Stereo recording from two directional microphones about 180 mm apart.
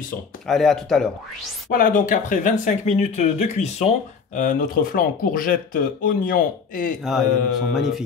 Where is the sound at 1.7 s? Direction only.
50° left (ahead or behind).